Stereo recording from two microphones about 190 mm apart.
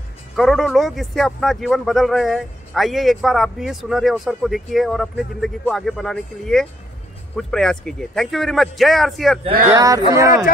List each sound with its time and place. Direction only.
0.4 s speech: centre (ahead or behind)
9.7 s speech: 15° right (ahead or behind)